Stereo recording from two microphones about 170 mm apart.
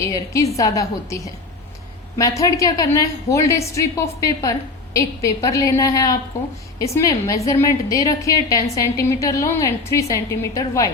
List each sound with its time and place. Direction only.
0.0 s a woman's voice: 20° left (ahead or behind)